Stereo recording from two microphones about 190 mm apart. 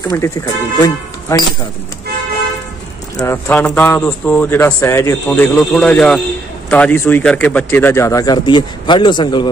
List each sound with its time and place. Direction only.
0.1 s speech: 15° left (ahead or behind)
3.2 s speech: 10° left (ahead or behind)